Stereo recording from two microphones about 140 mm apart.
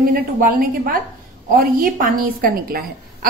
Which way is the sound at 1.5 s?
75° right (ahead or behind).